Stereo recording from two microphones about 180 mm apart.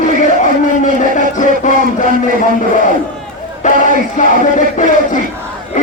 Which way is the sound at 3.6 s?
45° left (ahead or behind).